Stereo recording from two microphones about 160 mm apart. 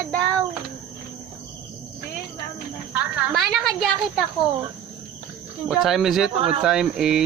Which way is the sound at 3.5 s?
Centre (ahead or behind).